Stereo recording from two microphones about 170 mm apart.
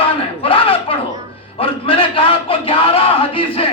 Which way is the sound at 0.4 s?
30° left (ahead or behind).